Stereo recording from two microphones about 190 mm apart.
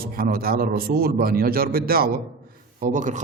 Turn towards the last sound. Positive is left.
turn(degrees=-40)  # may be behind; listen again after turning